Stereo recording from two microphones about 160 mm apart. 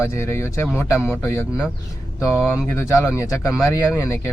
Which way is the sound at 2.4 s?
5° right (ahead or behind).